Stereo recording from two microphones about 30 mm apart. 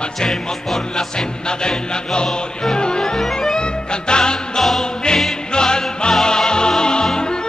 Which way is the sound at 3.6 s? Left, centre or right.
Left.